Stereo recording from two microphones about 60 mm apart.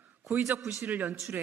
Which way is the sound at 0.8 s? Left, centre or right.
Right.